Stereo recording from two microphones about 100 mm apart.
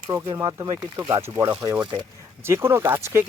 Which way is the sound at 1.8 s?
50° right (ahead or behind).